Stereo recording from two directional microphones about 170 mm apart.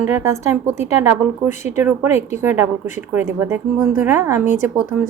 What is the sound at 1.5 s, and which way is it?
Speech, 45° left (ahead or behind).